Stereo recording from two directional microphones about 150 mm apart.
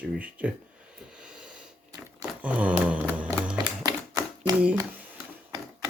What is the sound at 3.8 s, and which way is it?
Typewriter, 25° right (ahead or behind).